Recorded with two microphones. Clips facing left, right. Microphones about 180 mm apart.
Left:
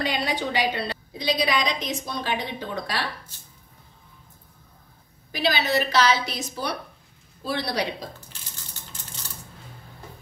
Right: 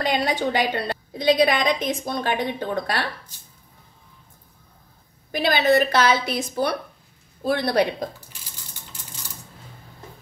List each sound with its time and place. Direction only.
0.0 s a woman's voice: 45° right (ahead or behind)
5.3 s a woman's voice: 50° right (ahead or behind)